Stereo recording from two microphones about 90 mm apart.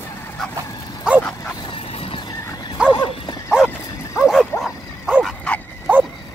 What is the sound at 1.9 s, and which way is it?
Vehicle, 90° left.